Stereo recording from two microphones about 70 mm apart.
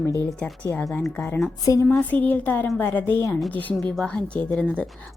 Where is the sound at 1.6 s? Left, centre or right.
Left.